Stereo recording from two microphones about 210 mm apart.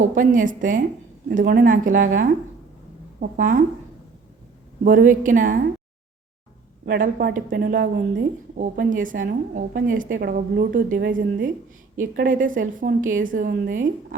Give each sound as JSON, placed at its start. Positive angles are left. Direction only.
{"t": 0.0, "sound": "a woman's voice", "side_deg": -40}
{"t": 4.8, "sound": "a woman's voice", "side_deg": -40}
{"t": 6.8, "sound": "a woman's voice", "side_deg": -45}